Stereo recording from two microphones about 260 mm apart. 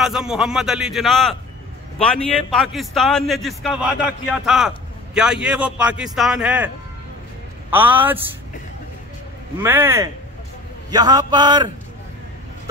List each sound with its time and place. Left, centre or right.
0.0 s a man's voice: centre
7.7 s a man's voice: centre
9.6 s a man's voice: centre